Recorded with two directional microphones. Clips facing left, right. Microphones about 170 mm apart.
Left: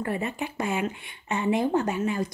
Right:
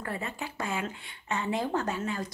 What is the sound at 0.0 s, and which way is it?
Speech, 20° left (ahead or behind).